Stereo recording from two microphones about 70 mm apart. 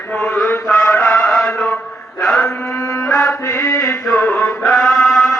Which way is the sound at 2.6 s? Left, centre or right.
Left.